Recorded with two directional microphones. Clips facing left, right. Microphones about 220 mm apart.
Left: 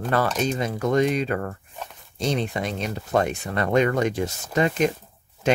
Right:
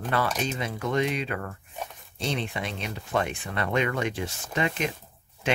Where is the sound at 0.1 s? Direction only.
40° left (ahead or behind).